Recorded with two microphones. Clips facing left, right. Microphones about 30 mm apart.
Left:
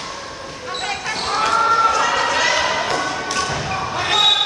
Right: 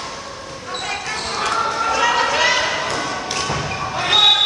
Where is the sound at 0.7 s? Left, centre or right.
Centre.